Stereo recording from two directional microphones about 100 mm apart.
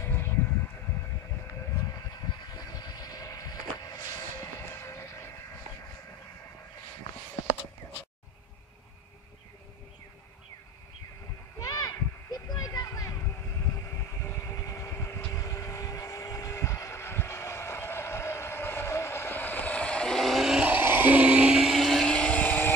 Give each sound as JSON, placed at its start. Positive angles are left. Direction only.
{"t": 0.0, "sound": "vehicle", "side_deg": 25}
{"t": 2.5, "sound": "vehicle", "side_deg": 45}
{"t": 11.6, "sound": "children playing", "side_deg": 40}
{"t": 14.2, "sound": "vehicle", "side_deg": 30}
{"t": 20.7, "sound": "a sound", "side_deg": -20}